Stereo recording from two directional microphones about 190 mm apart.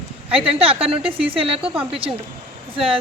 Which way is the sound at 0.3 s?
30° right (ahead or behind).